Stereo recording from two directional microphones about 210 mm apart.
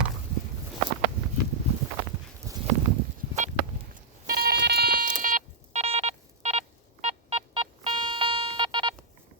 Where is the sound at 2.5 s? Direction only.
15° right (ahead or behind).